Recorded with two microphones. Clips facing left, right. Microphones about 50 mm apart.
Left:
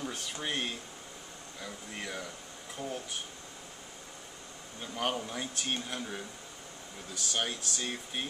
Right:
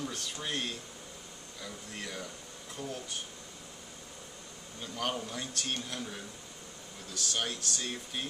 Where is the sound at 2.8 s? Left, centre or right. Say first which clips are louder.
Left 1 dB; left.